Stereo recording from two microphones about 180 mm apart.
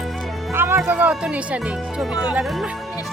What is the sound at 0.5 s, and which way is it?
Speech, 15° right (ahead or behind).